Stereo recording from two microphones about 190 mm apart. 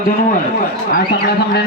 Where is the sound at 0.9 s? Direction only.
55° left (ahead or behind).